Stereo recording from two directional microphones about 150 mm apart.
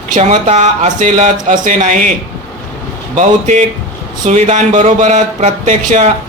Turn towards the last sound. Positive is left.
turn(degrees=-55)  # may be behind; listen again after turning